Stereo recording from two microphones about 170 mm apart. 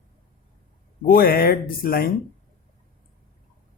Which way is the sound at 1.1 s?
60° left (ahead or behind).